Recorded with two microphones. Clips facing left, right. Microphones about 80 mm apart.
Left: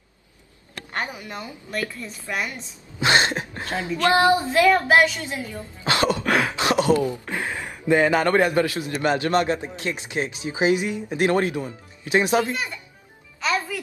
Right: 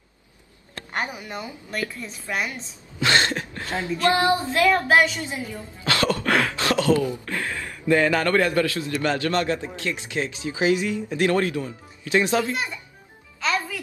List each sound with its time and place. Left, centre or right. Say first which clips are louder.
1.0 s a woman's voice: right 1 dB; centre
3.0 s a woman's voice: left 1 dB; left
4.6 s speech: left 1 dB; centre
5.3 s a woman's voice: even; centre
5.9 s a sound: left 1 dB; left
7.9 s speech: left 1 dB; left
13.4 s music: left 1 dB; centre